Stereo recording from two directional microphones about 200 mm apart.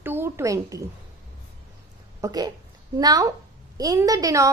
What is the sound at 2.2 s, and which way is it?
A woman's voice, 20° right (ahead or behind).